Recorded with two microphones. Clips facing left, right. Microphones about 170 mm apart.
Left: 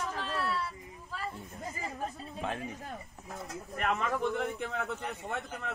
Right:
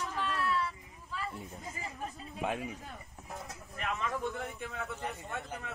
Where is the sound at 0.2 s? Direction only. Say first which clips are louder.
Right 3 dB; 35° left (ahead or behind).